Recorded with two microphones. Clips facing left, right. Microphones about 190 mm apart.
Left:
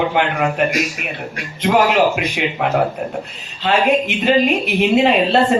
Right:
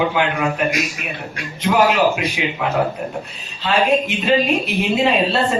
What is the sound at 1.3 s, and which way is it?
A woman's voice, 55° left (ahead or behind).